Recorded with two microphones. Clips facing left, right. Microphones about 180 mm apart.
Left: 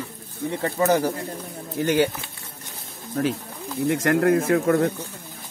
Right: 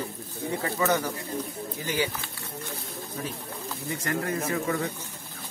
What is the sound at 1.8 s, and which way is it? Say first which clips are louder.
Speech: left 9 dB; 70° left (ahead or behind).